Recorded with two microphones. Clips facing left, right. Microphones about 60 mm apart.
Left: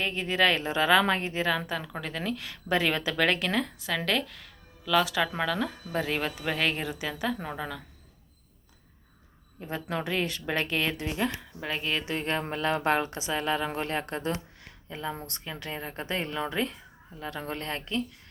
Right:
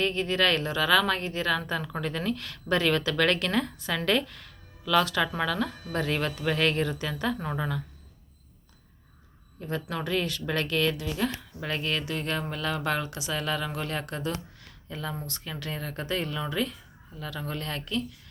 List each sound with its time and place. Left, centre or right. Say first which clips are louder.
0.0 s a woman's voice: even; centre
0.7 s a woman's voice: left 1 dB; left; by 7.8 s centre
9.6 s speech: even; centre
10.9 s speech: even; left
11.2 s a woman's voice: even; centre
12.0 s speech: left 1 dB; left
15.4 s speech: even; left